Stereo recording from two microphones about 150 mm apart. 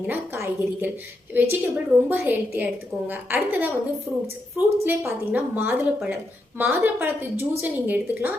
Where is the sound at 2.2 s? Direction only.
10° right (ahead or behind).